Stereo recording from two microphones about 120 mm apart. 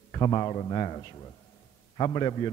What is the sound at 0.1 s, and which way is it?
A man's voice, 35° left (ahead or behind).